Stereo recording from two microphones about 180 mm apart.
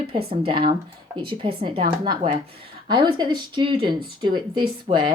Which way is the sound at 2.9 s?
25° right (ahead or behind).